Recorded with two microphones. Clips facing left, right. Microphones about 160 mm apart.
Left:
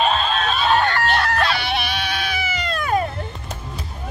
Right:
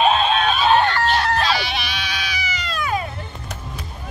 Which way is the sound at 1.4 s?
55° left (ahead or behind).